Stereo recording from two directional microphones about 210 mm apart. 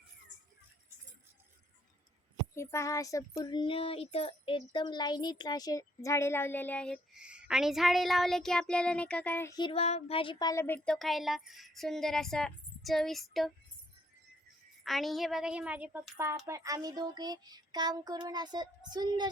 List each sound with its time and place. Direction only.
2.6 s speech: 15° left (ahead or behind)
14.8 s a woman's voice: centre (ahead or behind); by 19.3 s 20° right (ahead or behind)